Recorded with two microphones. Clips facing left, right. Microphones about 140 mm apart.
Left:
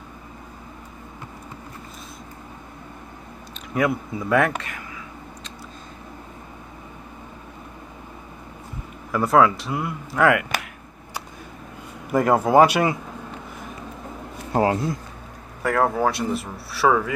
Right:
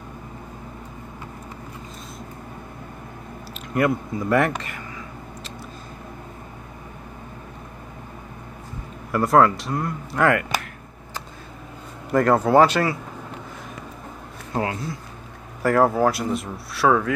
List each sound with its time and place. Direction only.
3.7 s speech: centre (ahead or behind)
9.1 s speech: centre (ahead or behind)
12.1 s speech: 10° left (ahead or behind)
14.5 s speech: 35° left (ahead or behind)
15.6 s speech: centre (ahead or behind)